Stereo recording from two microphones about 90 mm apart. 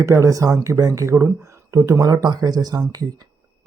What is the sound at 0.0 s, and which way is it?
Speech, 35° right (ahead or behind).